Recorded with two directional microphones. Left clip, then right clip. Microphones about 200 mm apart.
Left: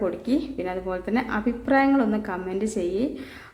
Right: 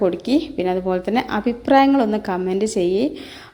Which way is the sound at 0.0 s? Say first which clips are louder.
Right 7 dB; 25° right (ahead or behind).